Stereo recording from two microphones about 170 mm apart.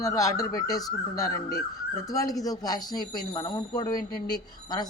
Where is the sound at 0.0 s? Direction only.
20° left (ahead or behind).